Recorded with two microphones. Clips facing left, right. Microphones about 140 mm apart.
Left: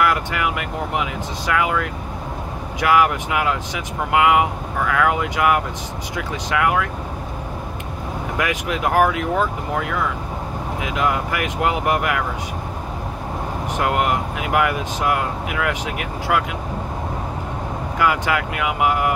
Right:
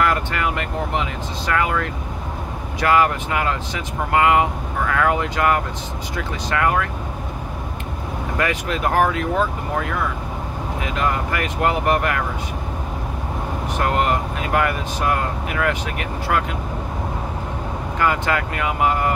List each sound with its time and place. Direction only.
0.0 s speech: 10° left (ahead or behind)
8.4 s speech: 15° left (ahead or behind)
13.7 s speech: 15° left (ahead or behind)
17.9 s speech: 10° left (ahead or behind)